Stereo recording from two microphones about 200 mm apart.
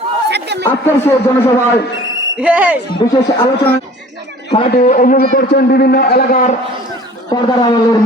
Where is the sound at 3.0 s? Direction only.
25° left (ahead or behind).